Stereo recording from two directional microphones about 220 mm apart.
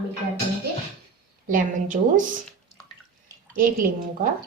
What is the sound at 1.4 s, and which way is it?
Speech, 35° right (ahead or behind).